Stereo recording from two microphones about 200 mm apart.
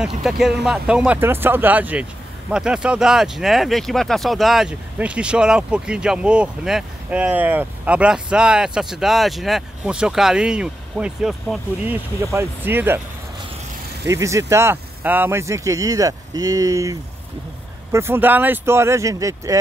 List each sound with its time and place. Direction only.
0.2 s speech: centre (ahead or behind)
14.1 s speech: 15° right (ahead or behind)
17.9 s speech: 10° right (ahead or behind)